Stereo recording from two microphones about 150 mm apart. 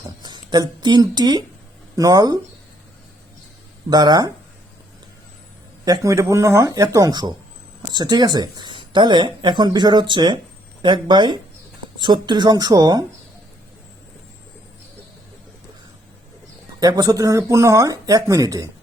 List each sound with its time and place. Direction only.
0.2 s speech: 30° right (ahead or behind)
3.8 s speech: 25° right (ahead or behind)
5.8 s speech: 25° right (ahead or behind)
16.8 s speech: 25° right (ahead or behind)